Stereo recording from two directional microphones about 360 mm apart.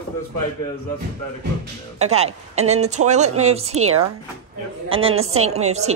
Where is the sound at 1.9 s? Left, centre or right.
Centre.